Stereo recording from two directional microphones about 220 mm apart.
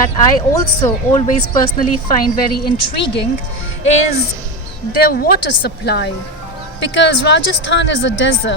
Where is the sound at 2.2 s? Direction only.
45° left (ahead or behind).